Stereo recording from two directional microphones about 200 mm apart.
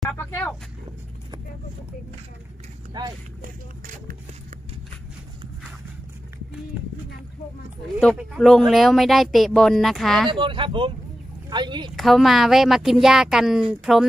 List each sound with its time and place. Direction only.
2.9 s a sound: 20° right (ahead or behind)
3.8 s music: 40° right (ahead or behind)
8.0 s speech: centre (ahead or behind)
10.3 s speech: 25° right (ahead or behind)
11.9 s speech: centre (ahead or behind)